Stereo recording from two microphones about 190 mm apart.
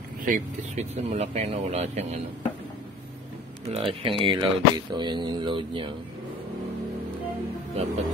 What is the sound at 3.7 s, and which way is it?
Speech, 30° right (ahead or behind).